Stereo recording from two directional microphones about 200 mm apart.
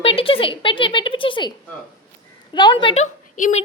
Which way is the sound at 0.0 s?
30° left (ahead or behind).